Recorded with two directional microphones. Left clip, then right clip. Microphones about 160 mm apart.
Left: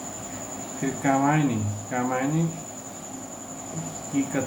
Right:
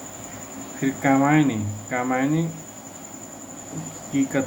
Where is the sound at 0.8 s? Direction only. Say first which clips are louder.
Right 3 dB; 60° right (ahead or behind).